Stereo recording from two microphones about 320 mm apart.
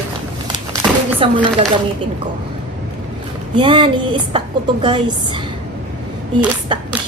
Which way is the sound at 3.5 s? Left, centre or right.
Centre.